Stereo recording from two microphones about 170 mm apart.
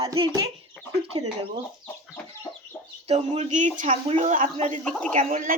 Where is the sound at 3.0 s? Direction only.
40° right (ahead or behind).